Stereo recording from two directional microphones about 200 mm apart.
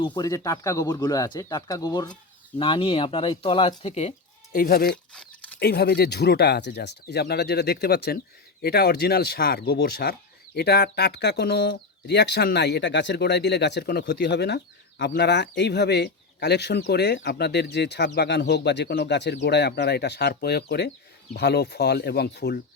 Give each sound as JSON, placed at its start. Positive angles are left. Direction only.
{"t": 0.0, "sound": "speech", "side_deg": 20}
{"t": 4.5, "sound": "speech", "side_deg": 45}
{"t": 4.9, "sound": "a sound", "side_deg": 5}
{"t": 5.5, "sound": "speech", "side_deg": 50}